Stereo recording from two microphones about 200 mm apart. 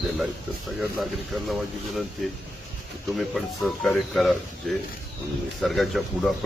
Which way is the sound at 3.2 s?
Centre (ahead or behind).